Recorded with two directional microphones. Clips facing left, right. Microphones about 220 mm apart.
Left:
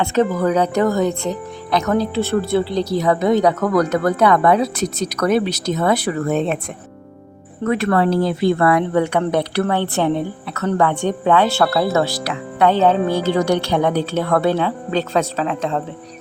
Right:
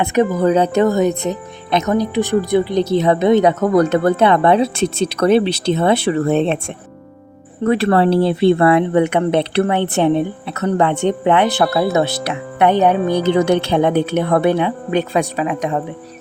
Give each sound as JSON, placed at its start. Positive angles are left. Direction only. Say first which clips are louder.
{"t": 0.0, "sound": "speech", "louder": "right 2 dB", "side_deg": -15}
{"t": 7.6, "sound": "speech", "louder": "right 3 dB", "side_deg": -30}